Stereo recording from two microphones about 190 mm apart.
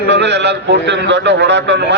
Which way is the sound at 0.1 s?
65° right (ahead or behind).